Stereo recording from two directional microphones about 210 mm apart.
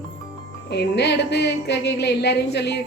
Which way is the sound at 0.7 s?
50° left (ahead or behind).